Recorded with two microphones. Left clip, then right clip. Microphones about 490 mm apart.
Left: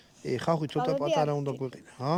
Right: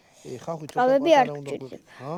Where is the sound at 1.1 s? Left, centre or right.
Right.